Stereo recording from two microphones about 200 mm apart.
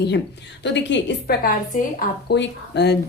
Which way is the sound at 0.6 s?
60° left (ahead or behind).